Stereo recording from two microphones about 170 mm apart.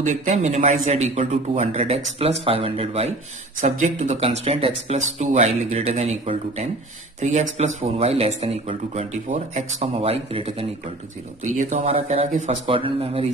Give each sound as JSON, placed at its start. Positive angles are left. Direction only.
{"t": 0.0, "sound": "a man's voice", "side_deg": -45}
{"t": 11.4, "sound": "a man's voice", "side_deg": -45}